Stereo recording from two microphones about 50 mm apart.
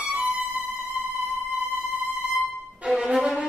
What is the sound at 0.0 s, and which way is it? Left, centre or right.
Music, right.